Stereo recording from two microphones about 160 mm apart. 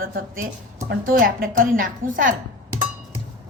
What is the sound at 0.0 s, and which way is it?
A woman's voice, 60° right (ahead or behind).